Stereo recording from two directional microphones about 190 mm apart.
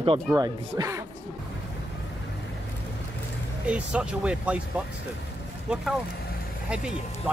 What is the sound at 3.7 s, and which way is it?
Speech, 5° right (ahead or behind).